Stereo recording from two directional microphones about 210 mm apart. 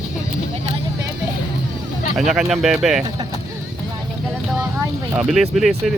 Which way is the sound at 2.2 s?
Centre (ahead or behind).